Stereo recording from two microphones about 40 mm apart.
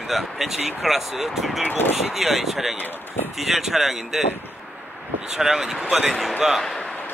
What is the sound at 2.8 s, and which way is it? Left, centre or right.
Speech, left.